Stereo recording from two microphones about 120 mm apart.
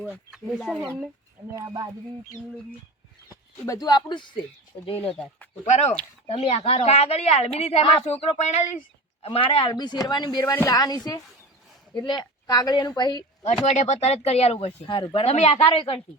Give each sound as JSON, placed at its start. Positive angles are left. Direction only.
{"t": 0.1, "sound": "speech", "side_deg": -5}
{"t": 1.5, "sound": "speech", "side_deg": -35}
{"t": 3.7, "sound": "a man's voice", "side_deg": 35}
{"t": 4.9, "sound": "speech", "side_deg": 10}
{"t": 5.6, "sound": "speech", "side_deg": 75}
{"t": 6.2, "sound": "a woman's voice", "side_deg": 55}
{"t": 9.2, "sound": "a man's voice", "side_deg": 50}
{"t": 13.4, "sound": "a woman's voice", "side_deg": 65}